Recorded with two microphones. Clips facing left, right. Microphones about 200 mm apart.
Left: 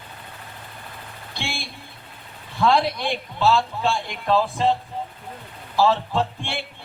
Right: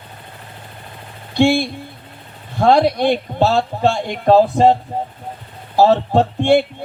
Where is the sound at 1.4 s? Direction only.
50° right (ahead or behind).